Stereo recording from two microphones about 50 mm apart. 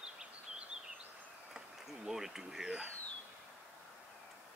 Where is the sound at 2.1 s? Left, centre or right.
Centre.